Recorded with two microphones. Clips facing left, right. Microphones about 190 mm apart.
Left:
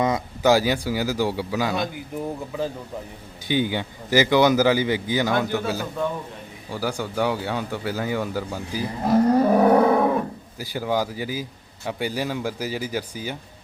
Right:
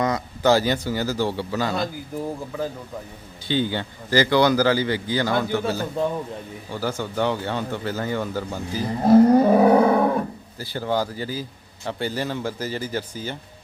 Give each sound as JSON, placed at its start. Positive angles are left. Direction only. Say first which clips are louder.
{"t": 0.0, "sound": "speech", "louder": "left 1 dB", "side_deg": 20}
{"t": 3.4, "sound": "speech", "louder": "even", "side_deg": 15}
{"t": 9.0, "sound": "a sound", "louder": "right 5 dB", "side_deg": -25}
{"t": 9.4, "sound": "roaring cats", "louder": "right 1 dB", "side_deg": -10}
{"t": 10.6, "sound": "speech", "louder": "even", "side_deg": 10}